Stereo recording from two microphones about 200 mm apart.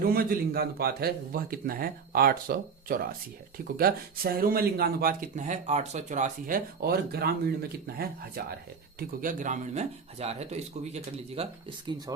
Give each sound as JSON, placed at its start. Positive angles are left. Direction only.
{"t": 0.0, "sound": "speech", "side_deg": -45}